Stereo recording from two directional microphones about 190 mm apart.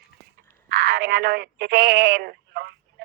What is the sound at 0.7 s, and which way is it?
Speech, 60° right (ahead or behind).